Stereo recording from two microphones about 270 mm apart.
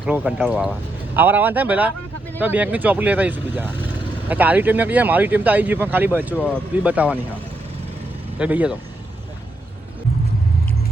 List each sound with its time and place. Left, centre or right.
0.0 s speech: centre
8.4 s speech: centre